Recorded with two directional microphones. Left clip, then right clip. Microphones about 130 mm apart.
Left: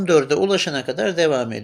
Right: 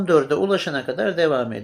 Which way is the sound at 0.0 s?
35° left (ahead or behind).